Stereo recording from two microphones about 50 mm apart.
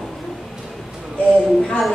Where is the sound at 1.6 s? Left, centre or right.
Centre.